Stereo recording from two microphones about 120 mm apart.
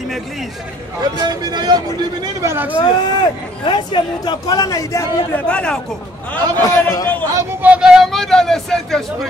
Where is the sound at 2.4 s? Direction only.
20° right (ahead or behind).